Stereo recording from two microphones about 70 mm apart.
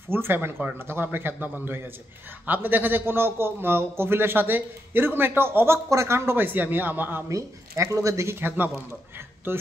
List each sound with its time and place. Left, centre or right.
0.1 s a man's voice: right
5.9 s a man's voice: right
7.2 s speech: right
8.4 s a man's voice: right